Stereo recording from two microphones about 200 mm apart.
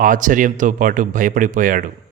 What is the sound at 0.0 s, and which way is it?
A man's voice, 40° right (ahead or behind).